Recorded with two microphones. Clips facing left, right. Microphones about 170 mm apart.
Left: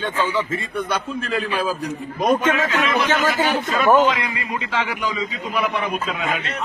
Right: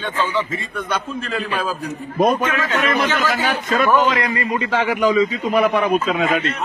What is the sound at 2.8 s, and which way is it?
A man's voice, 50° right (ahead or behind).